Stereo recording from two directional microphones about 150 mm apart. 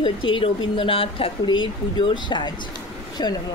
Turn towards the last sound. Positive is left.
turn(degrees=25)  # may be behind; listen again after turning